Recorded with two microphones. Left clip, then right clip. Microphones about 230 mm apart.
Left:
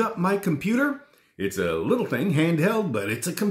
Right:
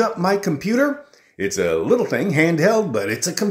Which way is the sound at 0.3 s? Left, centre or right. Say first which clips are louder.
Right 5 dB; left.